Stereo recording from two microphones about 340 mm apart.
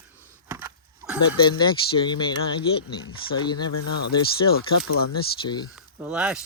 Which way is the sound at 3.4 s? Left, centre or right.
Centre.